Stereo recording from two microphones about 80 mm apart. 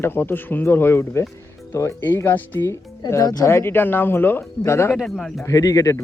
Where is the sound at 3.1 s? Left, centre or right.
Left.